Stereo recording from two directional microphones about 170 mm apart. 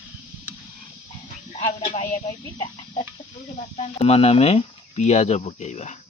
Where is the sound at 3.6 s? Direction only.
40° left (ahead or behind).